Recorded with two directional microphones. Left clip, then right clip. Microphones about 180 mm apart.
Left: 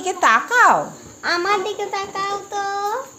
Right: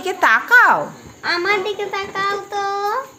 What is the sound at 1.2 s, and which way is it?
A child's voice, 25° left (ahead or behind).